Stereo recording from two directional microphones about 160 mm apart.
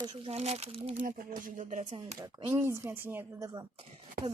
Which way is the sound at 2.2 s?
20° right (ahead or behind).